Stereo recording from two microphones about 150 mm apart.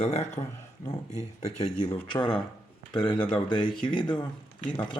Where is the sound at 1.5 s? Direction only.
45° left (ahead or behind).